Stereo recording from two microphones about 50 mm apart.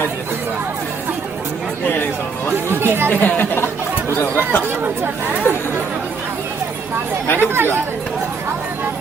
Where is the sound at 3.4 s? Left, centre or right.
Left.